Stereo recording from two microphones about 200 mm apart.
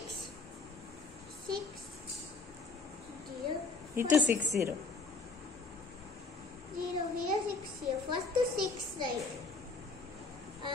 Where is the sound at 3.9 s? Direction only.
15° right (ahead or behind).